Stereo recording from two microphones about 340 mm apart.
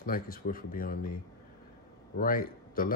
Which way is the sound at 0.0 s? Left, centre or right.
Left.